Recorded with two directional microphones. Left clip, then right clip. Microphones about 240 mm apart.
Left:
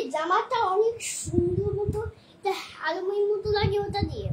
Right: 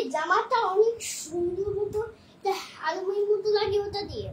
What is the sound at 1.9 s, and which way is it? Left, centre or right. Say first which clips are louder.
Child singing: right 2 dB; centre.